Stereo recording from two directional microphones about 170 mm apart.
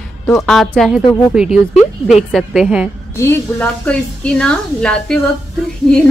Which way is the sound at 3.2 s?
10° left (ahead or behind).